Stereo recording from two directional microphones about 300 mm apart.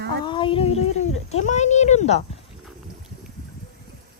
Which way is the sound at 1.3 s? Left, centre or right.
Left.